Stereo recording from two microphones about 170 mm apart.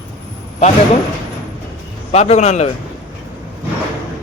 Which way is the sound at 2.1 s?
40° left (ahead or behind).